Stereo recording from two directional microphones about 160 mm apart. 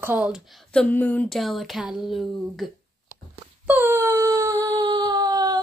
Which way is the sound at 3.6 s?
15° right (ahead or behind).